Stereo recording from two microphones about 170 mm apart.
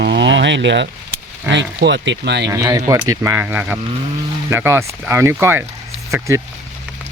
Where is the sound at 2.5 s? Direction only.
20° right (ahead or behind).